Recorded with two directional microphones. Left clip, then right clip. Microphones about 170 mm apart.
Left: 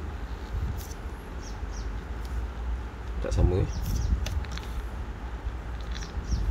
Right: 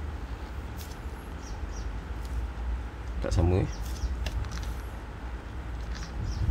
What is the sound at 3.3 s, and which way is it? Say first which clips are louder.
Speech: even; 30° right (ahead or behind).